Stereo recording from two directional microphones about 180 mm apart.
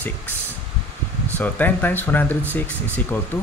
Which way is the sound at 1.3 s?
10° left (ahead or behind).